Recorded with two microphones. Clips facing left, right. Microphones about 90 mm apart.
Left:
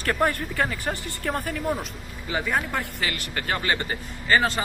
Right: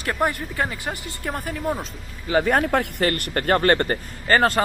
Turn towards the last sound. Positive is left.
turn(degrees=-50)  # may be behind; listen again after turning